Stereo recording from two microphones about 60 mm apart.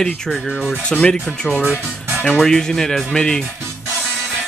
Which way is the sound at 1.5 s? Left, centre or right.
Left.